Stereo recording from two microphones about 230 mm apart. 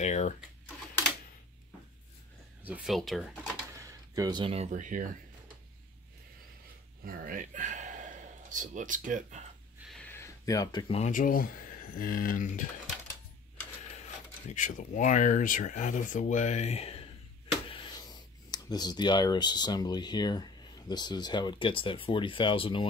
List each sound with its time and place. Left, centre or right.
0.0 s typing: left
2.6 s speech: centre
3.7 s speech: centre; by 5.1 s right
7.1 s speech: right
9.8 s speech: centre; by 12.6 s left
14.5 s speech: left